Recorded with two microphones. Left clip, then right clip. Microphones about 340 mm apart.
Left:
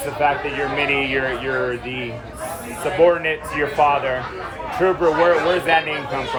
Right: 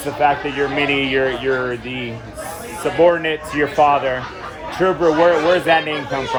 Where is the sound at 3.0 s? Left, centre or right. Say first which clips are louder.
Right 1 dB; right.